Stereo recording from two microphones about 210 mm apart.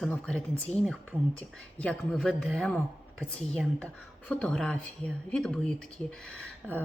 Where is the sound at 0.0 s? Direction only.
5° left (ahead or behind).